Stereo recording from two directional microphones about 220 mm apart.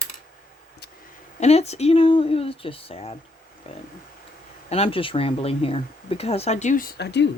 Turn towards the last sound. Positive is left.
turn(degrees=50)  # may be behind; listen again after turning